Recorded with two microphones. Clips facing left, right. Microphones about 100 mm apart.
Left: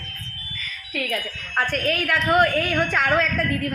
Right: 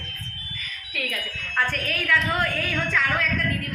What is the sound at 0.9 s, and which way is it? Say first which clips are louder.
A woman's voice: left 5 dB; 25° left (ahead or behind).